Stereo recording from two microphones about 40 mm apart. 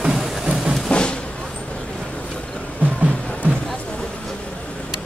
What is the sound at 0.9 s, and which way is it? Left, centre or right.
Vehicle, left.